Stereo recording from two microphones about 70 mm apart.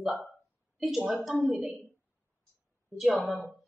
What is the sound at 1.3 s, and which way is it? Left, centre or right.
Speech, centre.